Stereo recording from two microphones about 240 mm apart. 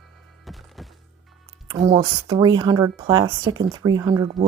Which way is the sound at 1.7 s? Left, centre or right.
Right.